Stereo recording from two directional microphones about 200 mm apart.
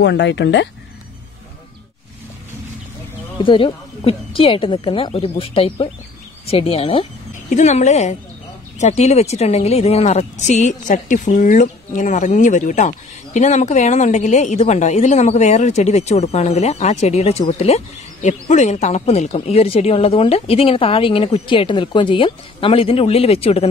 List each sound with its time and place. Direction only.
0.0 s speech: 60° left (ahead or behind)
3.3 s a woman's voice: 25° left (ahead or behind)